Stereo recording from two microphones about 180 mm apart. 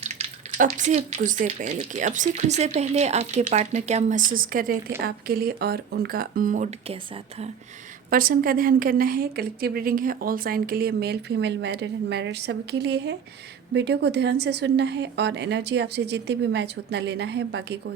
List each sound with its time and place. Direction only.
0.0 s a woman's voice: 40° right (ahead or behind)
8.1 s a woman's voice: 50° right (ahead or behind); by 17.9 s 70° right (ahead or behind)